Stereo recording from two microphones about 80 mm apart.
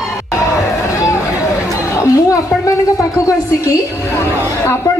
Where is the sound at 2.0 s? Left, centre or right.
Left.